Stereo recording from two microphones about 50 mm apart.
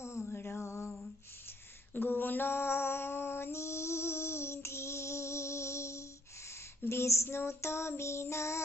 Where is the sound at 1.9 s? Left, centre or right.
Left.